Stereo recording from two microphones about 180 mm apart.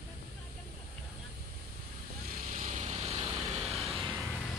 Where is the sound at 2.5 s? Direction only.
45° right (ahead or behind).